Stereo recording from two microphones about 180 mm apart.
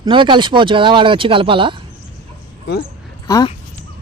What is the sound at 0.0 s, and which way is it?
Speech, 25° right (ahead or behind).